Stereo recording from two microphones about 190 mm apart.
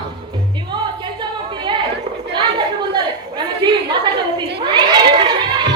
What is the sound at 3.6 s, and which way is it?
Chatter, 20° right (ahead or behind).